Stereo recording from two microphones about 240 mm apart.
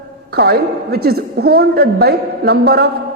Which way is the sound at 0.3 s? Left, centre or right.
Right.